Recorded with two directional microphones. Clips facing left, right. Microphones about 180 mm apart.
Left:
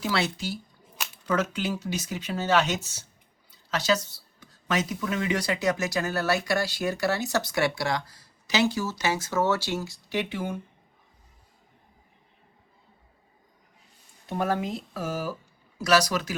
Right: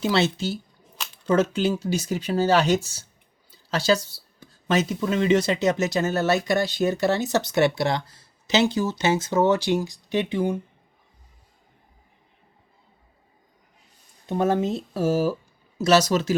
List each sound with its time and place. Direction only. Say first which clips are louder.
0.0 s speech: right 6 dB; 25° right (ahead or behind)
14.3 s speech: right 5 dB; 20° right (ahead or behind)